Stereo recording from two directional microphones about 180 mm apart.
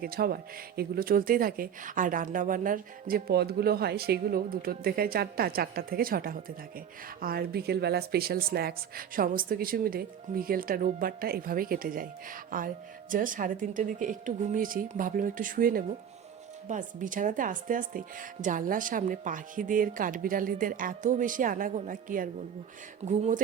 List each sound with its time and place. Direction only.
0.0 s a woman's voice: 55° right (ahead or behind); by 23.4 s 40° right (ahead or behind)